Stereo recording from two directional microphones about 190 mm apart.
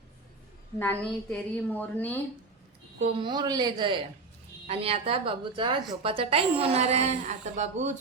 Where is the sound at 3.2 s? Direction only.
20° right (ahead or behind).